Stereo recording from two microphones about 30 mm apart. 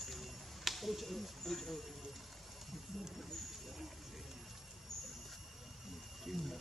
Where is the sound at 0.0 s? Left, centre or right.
Centre.